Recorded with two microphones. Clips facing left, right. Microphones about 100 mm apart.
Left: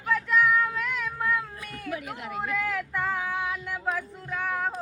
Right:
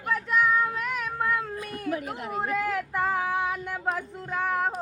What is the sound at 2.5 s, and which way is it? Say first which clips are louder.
Vehicle: right 2 dB; 20° right (ahead or behind).